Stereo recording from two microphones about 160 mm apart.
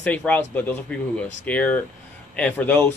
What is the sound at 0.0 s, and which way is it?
Speech, 10° left (ahead or behind).